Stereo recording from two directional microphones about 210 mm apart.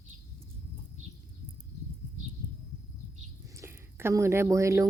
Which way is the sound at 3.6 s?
10° right (ahead or behind).